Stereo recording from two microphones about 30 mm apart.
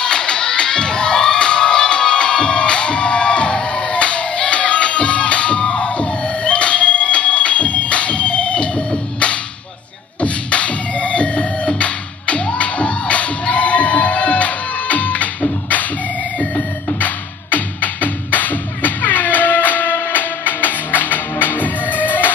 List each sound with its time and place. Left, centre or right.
0.0 s children shouting: left
10.2 s music: left
16.3 s music: left
21.5 s music: left